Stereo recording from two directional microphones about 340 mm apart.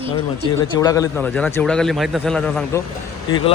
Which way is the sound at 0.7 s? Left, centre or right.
Centre.